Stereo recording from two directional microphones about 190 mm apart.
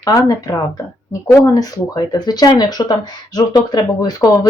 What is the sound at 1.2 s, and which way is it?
Speech, 20° left (ahead or behind).